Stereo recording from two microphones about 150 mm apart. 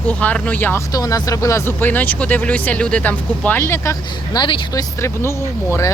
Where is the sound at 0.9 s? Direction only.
25° left (ahead or behind).